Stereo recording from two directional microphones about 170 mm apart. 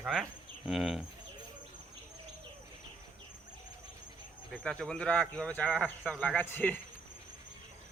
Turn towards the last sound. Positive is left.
turn(degrees=10)  # may be behind; listen again after turning